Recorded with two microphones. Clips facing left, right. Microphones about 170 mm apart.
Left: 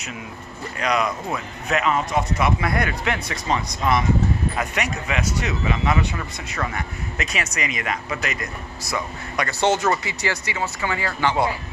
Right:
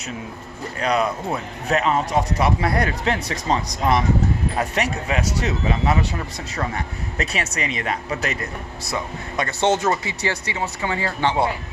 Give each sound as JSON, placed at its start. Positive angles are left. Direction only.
{"t": 0.8, "sound": "speech", "side_deg": -30}